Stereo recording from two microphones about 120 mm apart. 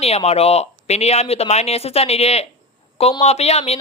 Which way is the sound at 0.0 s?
60° left (ahead or behind).